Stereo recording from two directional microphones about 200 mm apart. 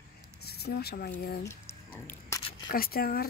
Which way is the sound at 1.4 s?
15° left (ahead or behind).